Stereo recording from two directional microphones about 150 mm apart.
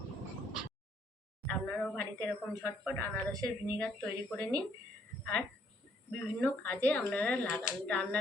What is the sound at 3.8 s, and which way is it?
Speech, 5° left (ahead or behind).